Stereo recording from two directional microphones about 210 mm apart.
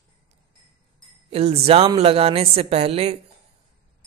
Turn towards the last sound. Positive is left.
turn(degrees=-30)  # may be behind; listen again after turning